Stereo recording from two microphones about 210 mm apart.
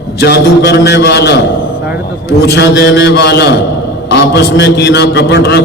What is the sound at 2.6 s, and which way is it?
A man's voice, 55° left (ahead or behind).